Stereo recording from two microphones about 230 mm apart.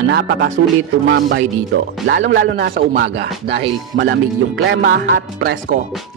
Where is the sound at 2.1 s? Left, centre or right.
Right.